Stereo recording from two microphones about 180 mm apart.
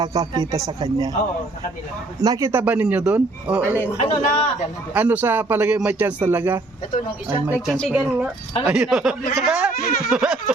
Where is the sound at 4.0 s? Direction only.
40° left (ahead or behind).